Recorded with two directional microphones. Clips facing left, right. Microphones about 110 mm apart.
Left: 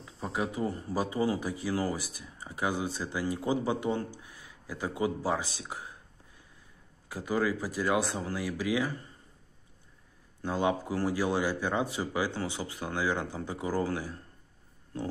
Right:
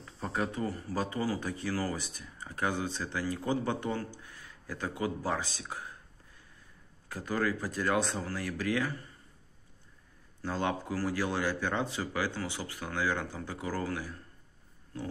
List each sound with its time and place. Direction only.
0.0 s a sound: 10° left (ahead or behind)
0.7 s speech: 20° left (ahead or behind)
7.1 s speech: 15° left (ahead or behind)
10.4 s speech: 15° left (ahead or behind)